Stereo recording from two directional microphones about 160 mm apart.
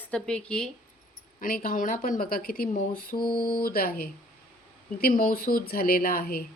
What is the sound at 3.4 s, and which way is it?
Speech, 70° left (ahead or behind).